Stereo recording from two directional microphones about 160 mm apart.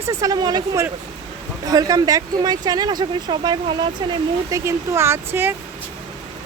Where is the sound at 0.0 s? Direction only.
20° right (ahead or behind).